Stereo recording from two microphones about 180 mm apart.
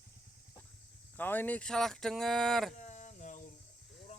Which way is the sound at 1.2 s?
10° left (ahead or behind).